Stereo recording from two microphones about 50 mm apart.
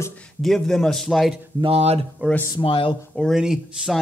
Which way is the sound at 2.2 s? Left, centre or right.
Right.